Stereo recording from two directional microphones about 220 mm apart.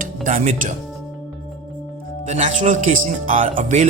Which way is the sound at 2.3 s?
30° right (ahead or behind).